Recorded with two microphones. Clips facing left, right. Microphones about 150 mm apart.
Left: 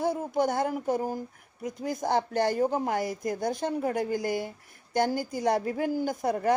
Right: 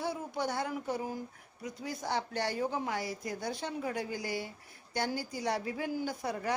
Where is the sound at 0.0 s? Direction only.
45° left (ahead or behind).